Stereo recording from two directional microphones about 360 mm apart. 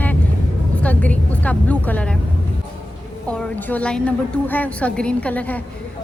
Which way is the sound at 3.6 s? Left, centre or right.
Centre.